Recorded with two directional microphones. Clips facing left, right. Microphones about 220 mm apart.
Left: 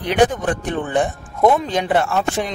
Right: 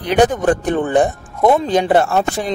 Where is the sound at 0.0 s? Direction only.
40° right (ahead or behind).